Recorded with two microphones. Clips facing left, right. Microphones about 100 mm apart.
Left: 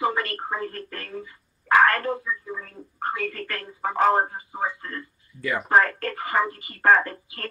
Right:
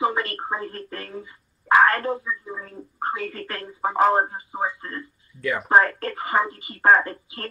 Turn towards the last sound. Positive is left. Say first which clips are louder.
# right 1 dB
turn(degrees=-20)  # may be behind; listen again after turning